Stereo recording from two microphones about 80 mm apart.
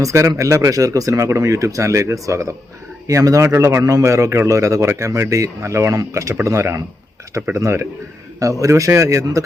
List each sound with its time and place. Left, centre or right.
0.0 s a man's voice: right